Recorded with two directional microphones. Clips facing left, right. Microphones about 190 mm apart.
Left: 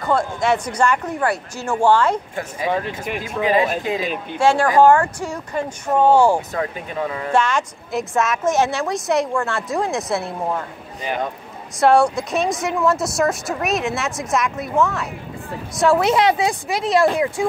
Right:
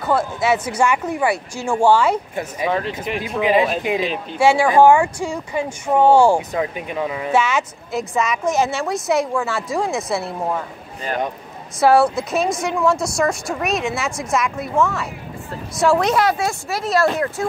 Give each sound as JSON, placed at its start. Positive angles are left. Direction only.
{"t": 0.0, "sound": "speech", "side_deg": -5}
{"t": 3.3, "sound": "speech", "side_deg": -15}
{"t": 11.8, "sound": "speech", "side_deg": 0}
{"t": 16.2, "sound": "speech", "side_deg": 20}